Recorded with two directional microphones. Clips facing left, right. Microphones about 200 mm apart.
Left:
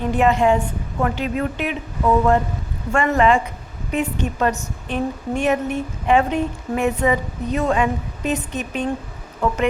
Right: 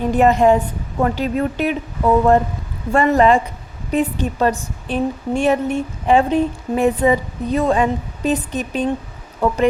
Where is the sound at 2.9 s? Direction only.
35° right (ahead or behind).